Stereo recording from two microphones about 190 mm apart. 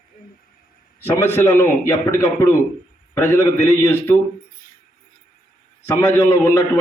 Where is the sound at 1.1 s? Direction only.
10° left (ahead or behind).